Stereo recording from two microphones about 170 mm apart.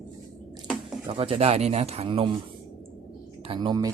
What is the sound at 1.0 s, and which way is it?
Speech, 30° right (ahead or behind).